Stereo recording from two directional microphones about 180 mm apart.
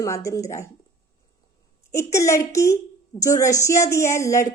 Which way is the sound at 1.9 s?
15° left (ahead or behind).